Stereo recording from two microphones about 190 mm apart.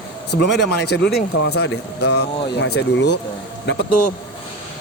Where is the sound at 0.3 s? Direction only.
60° left (ahead or behind).